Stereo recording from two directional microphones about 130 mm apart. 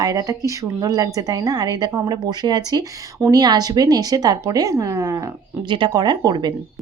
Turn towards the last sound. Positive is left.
turn(degrees=-35)  # may be behind; listen again after turning